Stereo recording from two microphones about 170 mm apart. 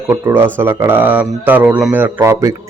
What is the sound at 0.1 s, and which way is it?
A man's voice, 15° right (ahead or behind).